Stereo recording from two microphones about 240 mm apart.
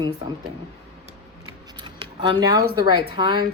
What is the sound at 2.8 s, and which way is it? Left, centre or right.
Speech, centre.